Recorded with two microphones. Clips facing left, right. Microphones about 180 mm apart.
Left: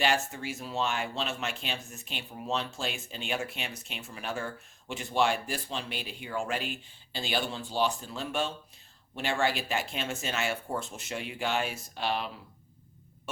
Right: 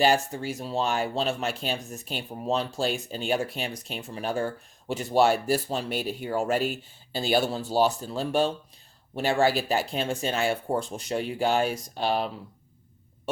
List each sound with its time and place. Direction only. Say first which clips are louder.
0.0 s speech: right 6 dB; 35° right (ahead or behind)
13.3 s heart sounds: right 9 dB; 35° right (ahead or behind)